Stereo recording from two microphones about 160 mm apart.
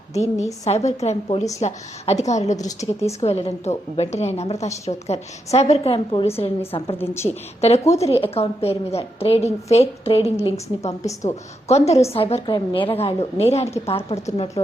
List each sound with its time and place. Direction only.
0.1 s a woman's voice: 45° left (ahead or behind)
2.6 s a woman's voice: 20° left (ahead or behind)
3.1 s a woman's voice: 40° left (ahead or behind)
7.0 s a woman's voice: 15° left (ahead or behind)
7.9 s a woman's voice: 40° left (ahead or behind)